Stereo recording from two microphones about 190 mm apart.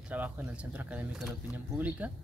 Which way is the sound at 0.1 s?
10° right (ahead or behind).